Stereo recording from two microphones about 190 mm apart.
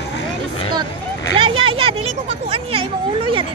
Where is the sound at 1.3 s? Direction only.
30° right (ahead or behind).